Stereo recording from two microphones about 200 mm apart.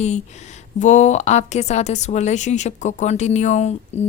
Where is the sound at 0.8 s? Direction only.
35° left (ahead or behind).